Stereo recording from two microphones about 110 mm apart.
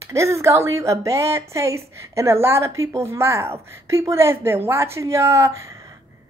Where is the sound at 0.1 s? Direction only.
25° right (ahead or behind).